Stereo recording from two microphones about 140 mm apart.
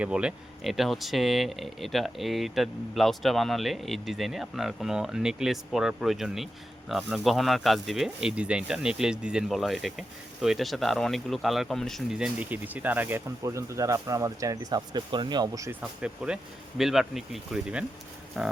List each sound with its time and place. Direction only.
0.0 s speech: 10° right (ahead or behind); by 15.7 s 25° right (ahead or behind)
16.0 s speech: 5° right (ahead or behind)